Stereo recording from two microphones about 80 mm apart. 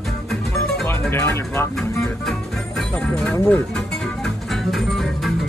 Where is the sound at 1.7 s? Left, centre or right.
Centre.